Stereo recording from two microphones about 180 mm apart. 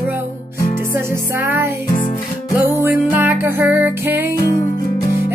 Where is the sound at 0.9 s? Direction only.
10° right (ahead or behind).